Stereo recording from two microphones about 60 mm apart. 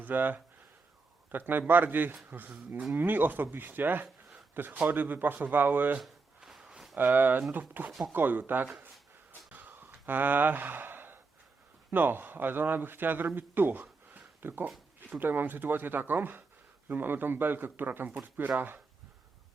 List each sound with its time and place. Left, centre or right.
0.0 s speech: right
6.0 s a sound: centre
6.9 s speech: right
9.5 s sigh: right
11.9 s speech: right
14.1 s a sound: right
15.2 s speech: right